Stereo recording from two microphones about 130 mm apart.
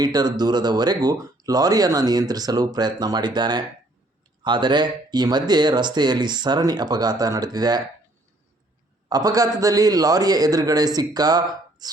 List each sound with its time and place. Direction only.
0.0 s speech: 30° right (ahead or behind)
9.0 s a man's voice: 30° right (ahead or behind)
11.8 s chopping: 30° right (ahead or behind)